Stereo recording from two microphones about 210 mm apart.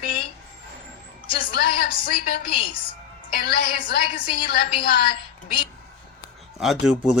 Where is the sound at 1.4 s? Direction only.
45° left (ahead or behind).